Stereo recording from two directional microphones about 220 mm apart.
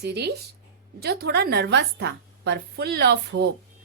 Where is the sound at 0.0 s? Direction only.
50° right (ahead or behind).